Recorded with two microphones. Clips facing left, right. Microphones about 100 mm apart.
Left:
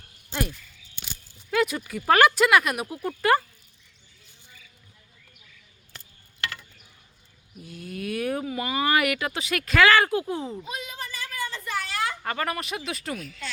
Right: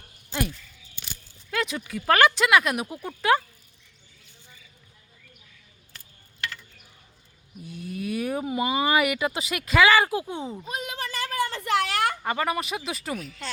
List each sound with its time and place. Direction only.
1.5 s speech: 5° left (ahead or behind)
7.6 s speech: centre (ahead or behind)
8.4 s speech: 15° right (ahead or behind); by 10.6 s centre (ahead or behind)
10.7 s a woman's voice: 50° right (ahead or behind)
10.9 s a sound: 70° right (ahead or behind)
12.2 s speech: 10° right (ahead or behind)